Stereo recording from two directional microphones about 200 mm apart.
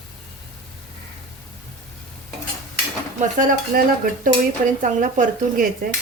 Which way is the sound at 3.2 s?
40° right (ahead or behind).